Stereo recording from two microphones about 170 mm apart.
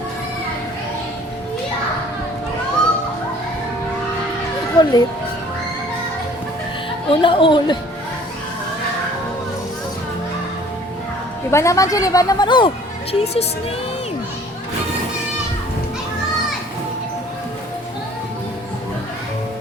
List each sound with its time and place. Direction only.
4.8 s a woman's voice: 25° left (ahead or behind)
7.1 s a woman's voice: 30° left (ahead or behind)
11.5 s a woman's voice: 20° left (ahead or behind); by 13.4 s 35° left (ahead or behind)